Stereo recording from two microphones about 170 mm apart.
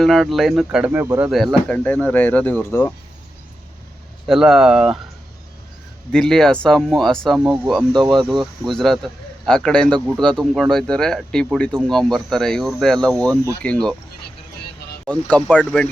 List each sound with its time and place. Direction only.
0.0 s speech: centre (ahead or behind)
4.3 s speech: centre (ahead or behind)
6.1 s speech: 5° left (ahead or behind)
7.9 s speech: 25° right (ahead or behind)
8.4 s speech: centre (ahead or behind)
15.0 s speech: 5° left (ahead or behind)